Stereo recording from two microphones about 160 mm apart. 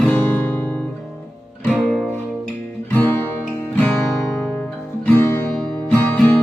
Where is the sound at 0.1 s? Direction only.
10° left (ahead or behind).